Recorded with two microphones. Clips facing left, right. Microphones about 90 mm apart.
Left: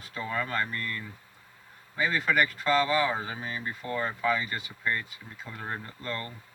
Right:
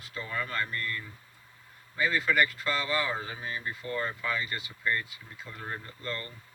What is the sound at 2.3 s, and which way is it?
Speech, 20° left (ahead or behind).